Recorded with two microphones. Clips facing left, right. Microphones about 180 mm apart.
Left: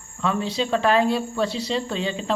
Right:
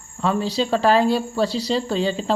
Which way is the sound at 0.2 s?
35° right (ahead or behind).